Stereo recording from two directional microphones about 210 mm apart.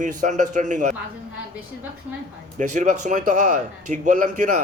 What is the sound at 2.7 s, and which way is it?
A man's voice, 35° right (ahead or behind).